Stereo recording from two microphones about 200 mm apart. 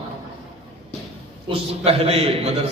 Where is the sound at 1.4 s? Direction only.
30° right (ahead or behind).